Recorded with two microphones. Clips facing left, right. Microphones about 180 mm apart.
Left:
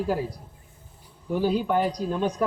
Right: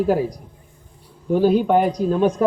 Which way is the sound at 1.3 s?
55° right (ahead or behind).